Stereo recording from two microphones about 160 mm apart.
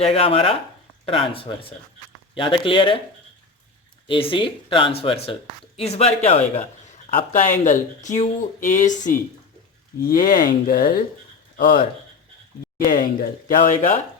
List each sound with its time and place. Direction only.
0.0 s speech: 35° left (ahead or behind)
4.0 s speech: 35° left (ahead or behind)
7.2 s speech: 55° left (ahead or behind)
10.0 s speech: 65° left (ahead or behind)